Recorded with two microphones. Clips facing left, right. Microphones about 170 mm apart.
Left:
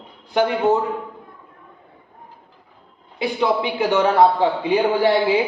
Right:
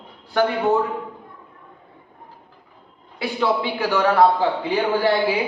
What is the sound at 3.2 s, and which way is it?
A man's voice, 20° left (ahead or behind).